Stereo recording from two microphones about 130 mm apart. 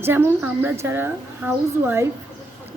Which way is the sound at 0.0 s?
15° right (ahead or behind).